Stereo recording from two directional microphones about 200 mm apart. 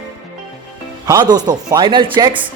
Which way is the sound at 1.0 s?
20° right (ahead or behind).